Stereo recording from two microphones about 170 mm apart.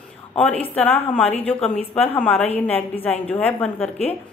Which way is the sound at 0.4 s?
10° left (ahead or behind).